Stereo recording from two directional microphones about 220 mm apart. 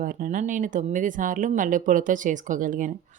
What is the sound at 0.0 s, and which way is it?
A woman's voice, 40° right (ahead or behind).